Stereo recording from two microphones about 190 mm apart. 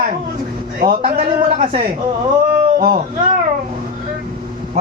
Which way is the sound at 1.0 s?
35° right (ahead or behind).